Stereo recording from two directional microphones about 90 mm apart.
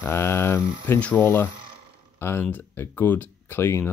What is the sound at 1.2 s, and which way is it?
Speech, 25° left (ahead or behind).